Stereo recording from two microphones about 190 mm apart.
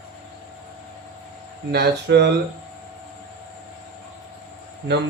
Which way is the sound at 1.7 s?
60° right (ahead or behind).